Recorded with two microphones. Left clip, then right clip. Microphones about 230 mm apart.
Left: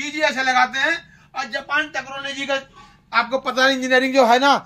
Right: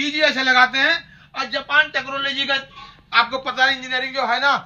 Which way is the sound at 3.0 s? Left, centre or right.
Left.